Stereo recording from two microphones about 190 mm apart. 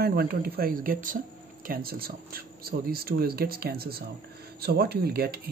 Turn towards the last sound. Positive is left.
turn(degrees=-55)  # may be behind; listen again after turning